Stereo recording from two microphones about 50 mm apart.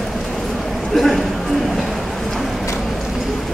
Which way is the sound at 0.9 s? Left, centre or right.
Centre.